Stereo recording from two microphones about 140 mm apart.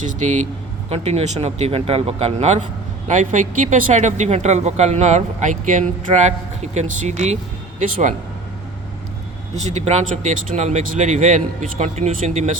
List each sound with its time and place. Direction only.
0.0 s speech: 60° right (ahead or behind)
0.9 s speech: 45° right (ahead or behind)
3.1 s speech: 60° right (ahead or behind)
9.6 s speech: 55° right (ahead or behind)